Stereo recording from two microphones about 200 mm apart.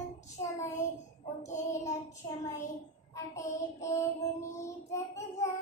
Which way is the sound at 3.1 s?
15° left (ahead or behind).